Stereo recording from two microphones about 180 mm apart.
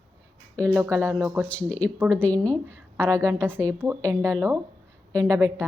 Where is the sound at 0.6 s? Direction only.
15° right (ahead or behind).